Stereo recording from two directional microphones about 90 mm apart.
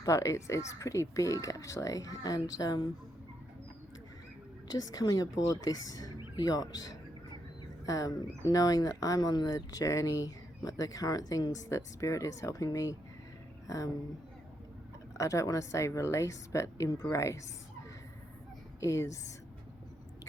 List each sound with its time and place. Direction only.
0.0 s speech: 35° left (ahead or behind)
4.7 s speech: 45° left (ahead or behind)
15.2 s speech: 35° left (ahead or behind)
18.8 s speech: 35° left (ahead or behind)